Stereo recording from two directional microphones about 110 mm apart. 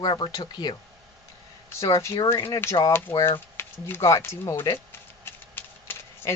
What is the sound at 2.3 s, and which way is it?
Speech, 25° left (ahead or behind).